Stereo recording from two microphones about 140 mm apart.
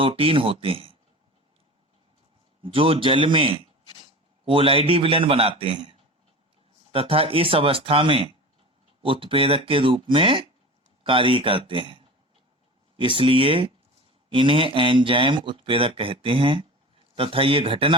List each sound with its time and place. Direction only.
0.0 s speech: 40° right (ahead or behind)
2.6 s speech: 40° right (ahead or behind)
6.9 s speech: 45° right (ahead or behind)